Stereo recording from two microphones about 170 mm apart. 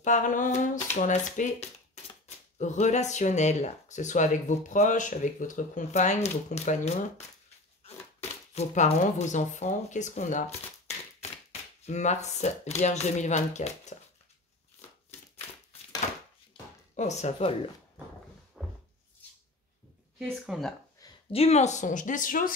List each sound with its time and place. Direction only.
0.0 s speech: 45° left (ahead or behind)
8.5 s speech: 40° left (ahead or behind)
11.8 s speech: 45° left (ahead or behind)
16.9 s speech: 45° left (ahead or behind)
18.6 s a sound: centre (ahead or behind)
20.2 s speech: centre (ahead or behind)
21.3 s speech: 35° left (ahead or behind); by 22.5 s 55° left (ahead or behind)